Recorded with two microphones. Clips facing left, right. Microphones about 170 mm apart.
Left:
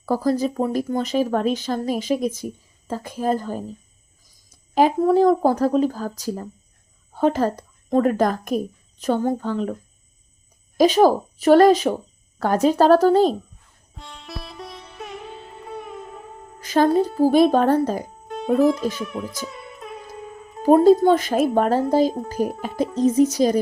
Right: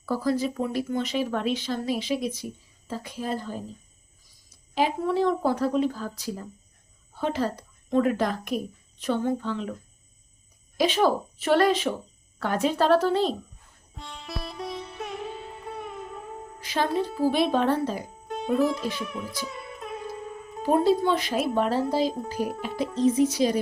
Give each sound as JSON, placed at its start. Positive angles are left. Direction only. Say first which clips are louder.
{"t": 0.0, "sound": "speech", "louder": "left 5 dB", "side_deg": 45}
{"t": 4.7, "sound": "speech", "louder": "left 8 dB", "side_deg": 45}
{"t": 10.8, "sound": "speech", "louder": "left 7 dB", "side_deg": 40}
{"t": 13.9, "sound": "music", "louder": "even", "side_deg": 0}
{"t": 16.6, "sound": "speech", "louder": "left 9 dB", "side_deg": 45}
{"t": 18.3, "sound": "speech", "louder": "left 6 dB", "side_deg": 0}
{"t": 19.5, "sound": "music", "louder": "even", "side_deg": 0}
{"t": 20.6, "sound": "speech", "louder": "left 8 dB", "side_deg": 45}